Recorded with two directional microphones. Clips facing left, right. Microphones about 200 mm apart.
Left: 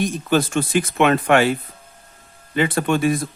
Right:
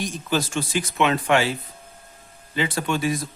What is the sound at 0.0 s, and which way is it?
Speech, 55° left (ahead or behind).